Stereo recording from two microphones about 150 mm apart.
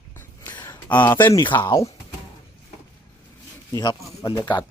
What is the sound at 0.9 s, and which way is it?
Speech, 10° left (ahead or behind).